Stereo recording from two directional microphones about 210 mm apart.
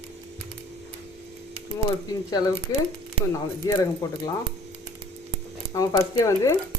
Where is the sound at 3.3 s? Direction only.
15° left (ahead or behind).